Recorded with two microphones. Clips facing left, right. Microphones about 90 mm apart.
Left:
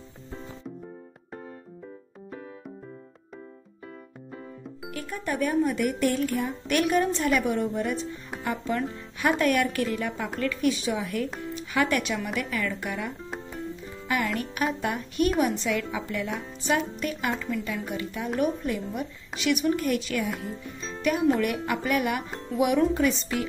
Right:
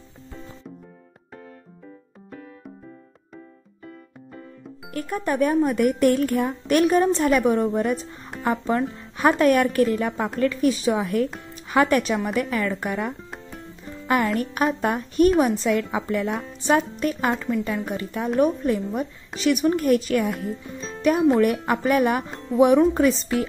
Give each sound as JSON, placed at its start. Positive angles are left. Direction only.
{"t": 4.9, "sound": "a woman's voice", "side_deg": -45}
{"t": 22.3, "sound": "music", "side_deg": 0}
{"t": 22.6, "sound": "a woman's voice", "side_deg": -35}